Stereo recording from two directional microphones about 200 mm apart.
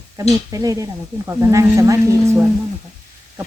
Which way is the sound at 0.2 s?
15° right (ahead or behind).